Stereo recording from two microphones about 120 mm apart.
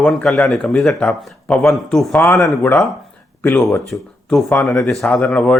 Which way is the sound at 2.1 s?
15° left (ahead or behind).